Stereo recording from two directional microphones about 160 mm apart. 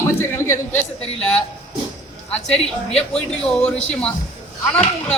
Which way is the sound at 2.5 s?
5° left (ahead or behind).